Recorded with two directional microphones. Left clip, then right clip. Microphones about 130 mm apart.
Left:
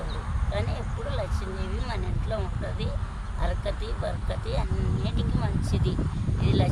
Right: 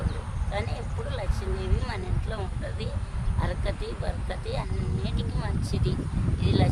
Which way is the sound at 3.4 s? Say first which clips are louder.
Left 1 dB; 20° right (ahead or behind).